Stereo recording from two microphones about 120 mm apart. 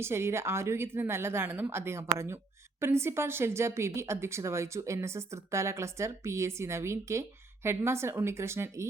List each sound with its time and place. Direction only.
0.0 s speech: 20° right (ahead or behind)